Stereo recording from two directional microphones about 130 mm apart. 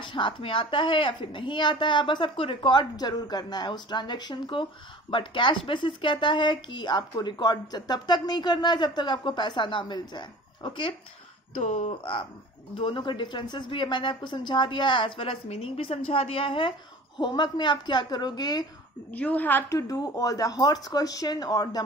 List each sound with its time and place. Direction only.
0.0 s speech: 40° left (ahead or behind)
11.5 s speech: 60° left (ahead or behind)
12.0 s speech: 40° left (ahead or behind)
19.1 s a woman's voice: 10° left (ahead or behind)
19.9 s speech: 25° left (ahead or behind)